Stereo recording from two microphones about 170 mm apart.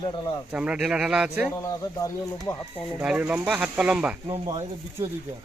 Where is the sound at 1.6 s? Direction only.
20° left (ahead or behind).